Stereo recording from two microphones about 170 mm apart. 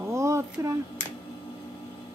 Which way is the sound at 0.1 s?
15° right (ahead or behind).